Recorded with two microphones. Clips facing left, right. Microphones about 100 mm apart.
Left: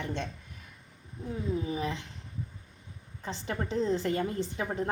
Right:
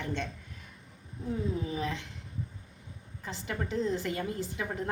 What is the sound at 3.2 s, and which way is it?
Speech, 25° left (ahead or behind).